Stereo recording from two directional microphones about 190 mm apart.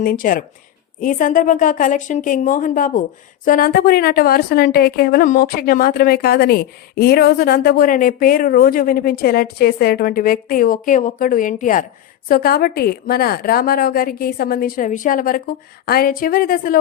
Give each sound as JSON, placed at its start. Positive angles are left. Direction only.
{"t": 0.0, "sound": "speech", "side_deg": 50}